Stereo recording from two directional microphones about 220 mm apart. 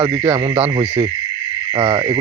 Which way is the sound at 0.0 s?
20° right (ahead or behind).